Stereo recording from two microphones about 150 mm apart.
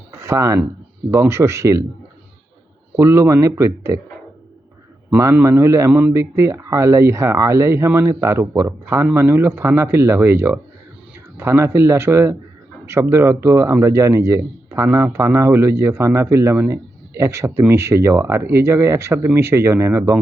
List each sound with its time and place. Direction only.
0.2 s a man's voice: 20° right (ahead or behind)
2.9 s a man's voice: 15° right (ahead or behind)
5.1 s a man's voice: 15° right (ahead or behind)